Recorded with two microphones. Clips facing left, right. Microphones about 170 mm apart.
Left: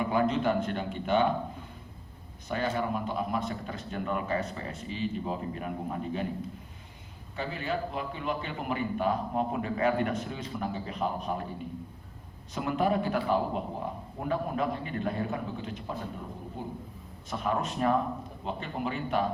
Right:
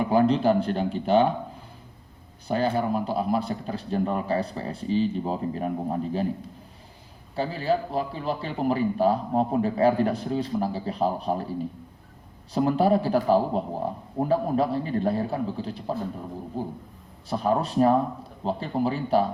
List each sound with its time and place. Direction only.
0.1 s a man's voice: 35° right (ahead or behind)
2.5 s a man's voice: 35° right (ahead or behind)
7.3 s a man's voice: 35° right (ahead or behind)
12.5 s a man's voice: 35° right (ahead or behind)